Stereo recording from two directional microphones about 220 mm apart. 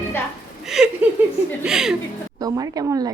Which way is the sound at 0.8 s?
5° right (ahead or behind).